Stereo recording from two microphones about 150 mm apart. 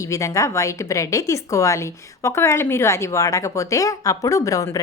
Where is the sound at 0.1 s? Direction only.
20° left (ahead or behind).